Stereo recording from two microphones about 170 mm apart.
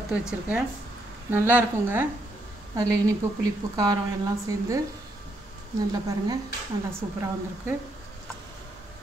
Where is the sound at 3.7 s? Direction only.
25° right (ahead or behind).